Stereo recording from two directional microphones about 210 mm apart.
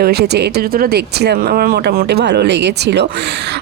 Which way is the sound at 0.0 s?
50° right (ahead or behind).